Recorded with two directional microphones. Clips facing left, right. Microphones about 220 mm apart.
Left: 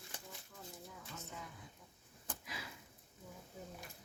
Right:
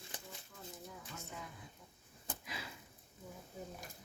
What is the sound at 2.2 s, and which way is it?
Sniff, 25° right (ahead or behind).